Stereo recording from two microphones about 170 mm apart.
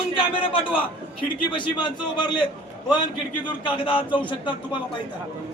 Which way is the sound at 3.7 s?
30° left (ahead or behind).